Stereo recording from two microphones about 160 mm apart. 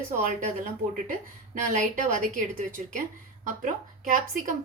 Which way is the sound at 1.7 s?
55° right (ahead or behind).